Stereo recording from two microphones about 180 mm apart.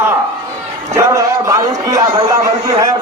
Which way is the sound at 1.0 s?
15° right (ahead or behind).